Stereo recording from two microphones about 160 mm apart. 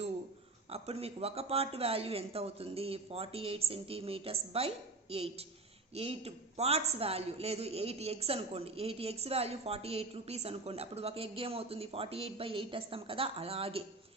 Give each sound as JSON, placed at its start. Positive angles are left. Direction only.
{"t": 0.7, "sound": "a man's voice", "side_deg": -40}